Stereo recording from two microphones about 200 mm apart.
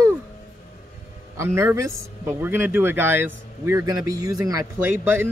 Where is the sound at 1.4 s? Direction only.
15° right (ahead or behind).